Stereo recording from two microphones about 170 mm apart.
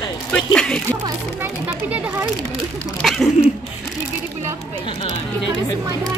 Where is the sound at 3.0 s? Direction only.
Centre (ahead or behind).